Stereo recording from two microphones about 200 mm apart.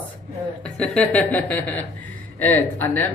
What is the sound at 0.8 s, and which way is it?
Speech, 5° left (ahead or behind).